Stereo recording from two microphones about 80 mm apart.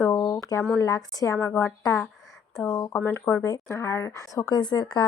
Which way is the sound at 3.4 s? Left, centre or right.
Left.